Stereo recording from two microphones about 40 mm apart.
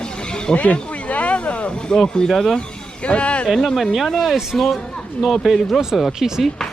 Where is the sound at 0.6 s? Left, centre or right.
Left.